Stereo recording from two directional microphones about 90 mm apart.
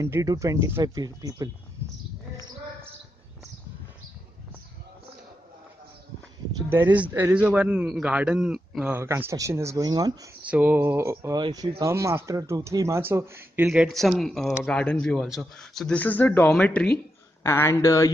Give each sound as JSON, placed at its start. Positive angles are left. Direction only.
{"t": 0.0, "sound": "speech", "side_deg": -35}
{"t": 6.7, "sound": "a man's voice", "side_deg": -20}
{"t": 8.9, "sound": "speech", "side_deg": -25}
{"t": 9.8, "sound": "speech", "side_deg": -50}
{"t": 10.4, "sound": "speech", "side_deg": -15}
{"t": 11.3, "sound": "speech", "side_deg": -50}
{"t": 11.9, "sound": "speech", "side_deg": -30}
{"t": 13.7, "sound": "speech", "side_deg": 0}
{"t": 15.9, "sound": "speech", "side_deg": 20}
{"t": 17.4, "sound": "speech", "side_deg": 30}